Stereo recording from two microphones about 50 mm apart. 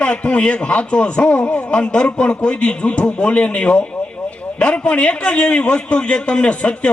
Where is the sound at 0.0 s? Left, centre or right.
Left.